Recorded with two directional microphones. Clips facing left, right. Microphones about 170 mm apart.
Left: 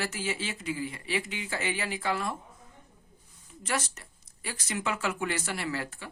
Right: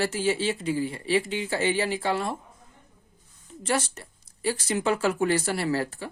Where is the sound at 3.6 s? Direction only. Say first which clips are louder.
Right 6 dB; 30° right (ahead or behind).